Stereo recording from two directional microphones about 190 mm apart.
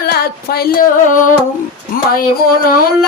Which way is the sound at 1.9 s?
50° left (ahead or behind).